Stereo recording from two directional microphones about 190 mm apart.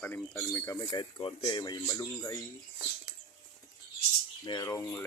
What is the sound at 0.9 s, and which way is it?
Speech, 25° left (ahead or behind).